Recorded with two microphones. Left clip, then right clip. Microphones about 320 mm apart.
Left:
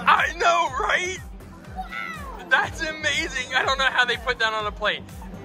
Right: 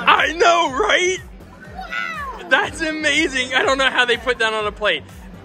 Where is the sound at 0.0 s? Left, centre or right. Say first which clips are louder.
Right 5 dB; centre.